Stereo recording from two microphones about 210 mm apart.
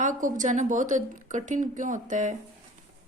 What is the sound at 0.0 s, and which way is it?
A woman's voice, 40° right (ahead or behind).